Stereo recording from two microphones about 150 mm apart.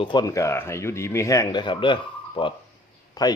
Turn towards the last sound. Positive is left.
turn(degrees=25)  # may be behind; listen again after turning